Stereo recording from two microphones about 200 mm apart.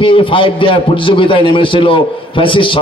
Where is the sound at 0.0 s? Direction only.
25° left (ahead or behind).